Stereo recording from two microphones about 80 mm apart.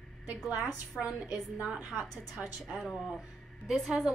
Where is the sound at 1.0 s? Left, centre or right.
Centre.